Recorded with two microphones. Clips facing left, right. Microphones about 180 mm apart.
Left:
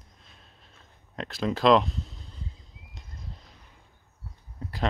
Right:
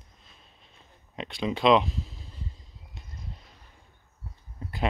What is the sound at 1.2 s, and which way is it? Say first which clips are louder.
Speech: left 1 dB; centre (ahead or behind).